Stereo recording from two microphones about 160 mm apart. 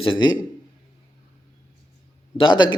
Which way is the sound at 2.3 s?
30° left (ahead or behind).